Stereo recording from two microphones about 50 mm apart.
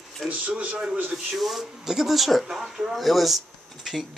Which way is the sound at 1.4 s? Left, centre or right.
Centre.